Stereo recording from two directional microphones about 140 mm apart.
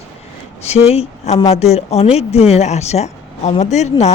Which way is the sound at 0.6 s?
50° left (ahead or behind).